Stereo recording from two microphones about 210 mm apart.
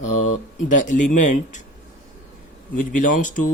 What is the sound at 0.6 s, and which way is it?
Speech, 35° left (ahead or behind).